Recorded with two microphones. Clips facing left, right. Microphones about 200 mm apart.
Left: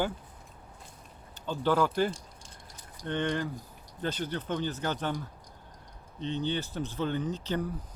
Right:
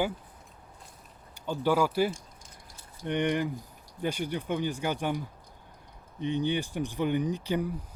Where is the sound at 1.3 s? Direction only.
10° right (ahead or behind).